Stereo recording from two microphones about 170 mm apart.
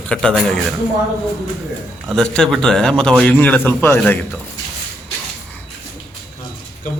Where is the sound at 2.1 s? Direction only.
5° left (ahead or behind).